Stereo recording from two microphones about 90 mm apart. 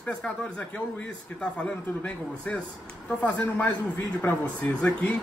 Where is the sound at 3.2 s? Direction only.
15° left (ahead or behind).